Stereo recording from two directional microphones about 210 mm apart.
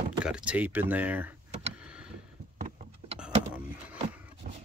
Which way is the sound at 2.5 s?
35° right (ahead or behind).